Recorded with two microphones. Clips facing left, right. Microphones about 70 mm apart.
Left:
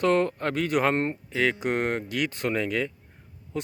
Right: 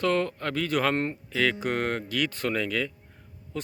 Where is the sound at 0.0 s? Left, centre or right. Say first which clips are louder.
Left 3 dB; left.